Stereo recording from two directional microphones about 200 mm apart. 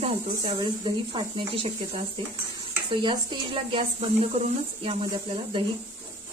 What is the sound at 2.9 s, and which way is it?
Speech, 25° right (ahead or behind).